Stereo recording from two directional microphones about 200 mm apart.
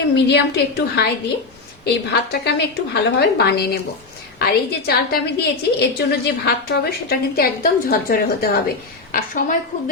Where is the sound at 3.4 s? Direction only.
55° left (ahead or behind).